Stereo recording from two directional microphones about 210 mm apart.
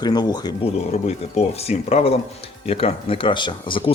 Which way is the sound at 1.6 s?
30° left (ahead or behind).